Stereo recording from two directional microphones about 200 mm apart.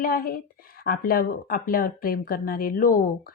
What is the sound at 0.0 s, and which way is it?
Speech, 45° left (ahead or behind).